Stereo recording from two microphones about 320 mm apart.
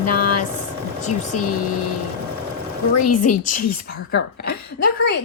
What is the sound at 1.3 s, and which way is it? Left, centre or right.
Speech, left.